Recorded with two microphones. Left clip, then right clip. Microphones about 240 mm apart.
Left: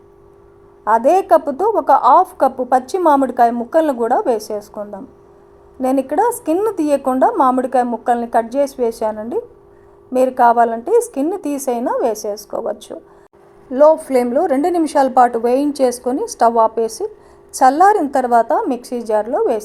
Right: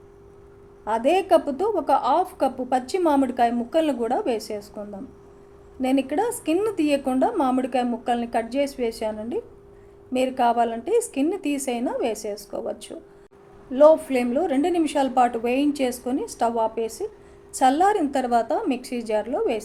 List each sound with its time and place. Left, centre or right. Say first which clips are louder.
0.9 s a woman's voice: left 8 dB; centre
5.8 s a woman's voice: left 8 dB; centre
12.3 s a woman's voice: left 8 dB; centre
12.5 s a woman's voice: left 8 dB; centre